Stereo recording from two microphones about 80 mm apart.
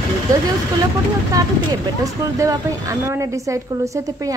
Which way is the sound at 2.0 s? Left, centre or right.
Right.